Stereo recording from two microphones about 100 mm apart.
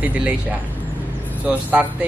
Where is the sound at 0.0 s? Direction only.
15° right (ahead or behind).